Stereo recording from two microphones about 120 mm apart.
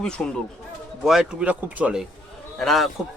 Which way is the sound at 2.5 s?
Centre (ahead or behind).